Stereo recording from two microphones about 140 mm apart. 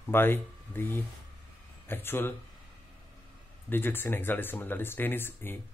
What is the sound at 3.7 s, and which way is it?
Speech, 15° left (ahead or behind).